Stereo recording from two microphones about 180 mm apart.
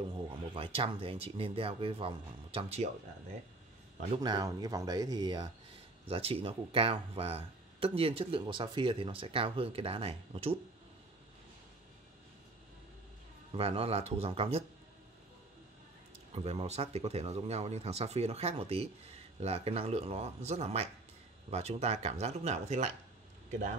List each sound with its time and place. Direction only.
0.0 s speech: 30° right (ahead or behind)
4.1 s speech: 25° right (ahead or behind)
13.6 s speech: 35° right (ahead or behind)
16.3 s speech: 35° right (ahead or behind)